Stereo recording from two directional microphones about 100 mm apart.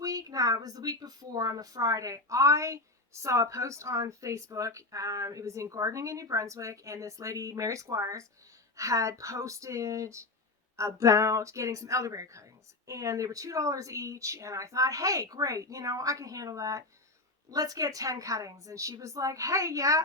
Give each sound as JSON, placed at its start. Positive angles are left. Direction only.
{"t": 0.0, "sound": "a woman's voice", "side_deg": -35}